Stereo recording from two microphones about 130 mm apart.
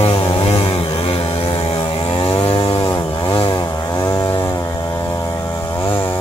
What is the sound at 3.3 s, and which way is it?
Chainsaw, 35° left (ahead or behind).